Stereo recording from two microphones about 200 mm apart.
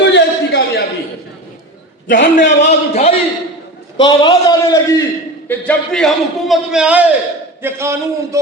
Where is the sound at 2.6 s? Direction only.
35° left (ahead or behind).